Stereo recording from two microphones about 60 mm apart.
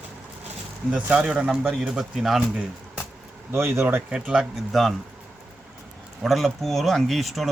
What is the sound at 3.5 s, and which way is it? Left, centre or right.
Speech, right.